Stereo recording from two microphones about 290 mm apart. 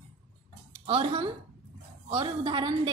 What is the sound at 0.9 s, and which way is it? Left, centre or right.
A woman's voice, centre.